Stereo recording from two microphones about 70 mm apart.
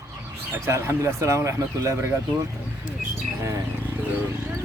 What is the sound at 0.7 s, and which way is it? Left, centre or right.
Speech, right.